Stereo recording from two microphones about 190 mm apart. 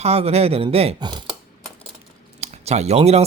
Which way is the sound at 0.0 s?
35° right (ahead or behind).